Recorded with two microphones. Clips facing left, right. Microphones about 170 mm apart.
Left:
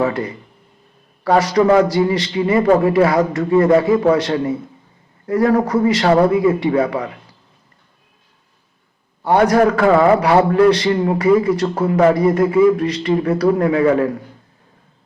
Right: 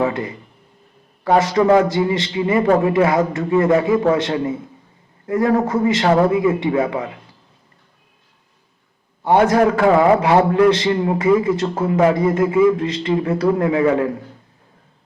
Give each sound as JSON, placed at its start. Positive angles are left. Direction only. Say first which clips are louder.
{"t": 0.0, "sound": "a man's voice", "louder": "left 1 dB", "side_deg": -20}
{"t": 9.2, "sound": "a man's voice", "louder": "left 1 dB", "side_deg": -25}